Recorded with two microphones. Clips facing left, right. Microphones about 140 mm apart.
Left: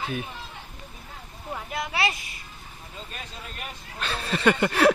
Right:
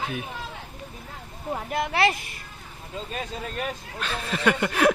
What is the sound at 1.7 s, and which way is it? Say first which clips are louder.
Speech: right 5 dB; 55° right (ahead or behind).